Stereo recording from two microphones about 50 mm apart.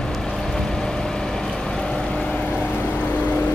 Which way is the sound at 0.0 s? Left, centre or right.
Centre.